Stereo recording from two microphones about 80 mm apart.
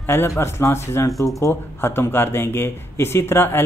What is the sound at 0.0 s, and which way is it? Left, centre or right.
Speech, left.